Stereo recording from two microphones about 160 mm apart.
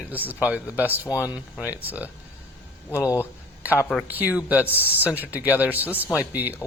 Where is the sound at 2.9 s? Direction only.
15° left (ahead or behind).